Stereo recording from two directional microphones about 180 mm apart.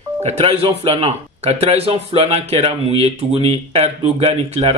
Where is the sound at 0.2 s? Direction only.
35° right (ahead or behind).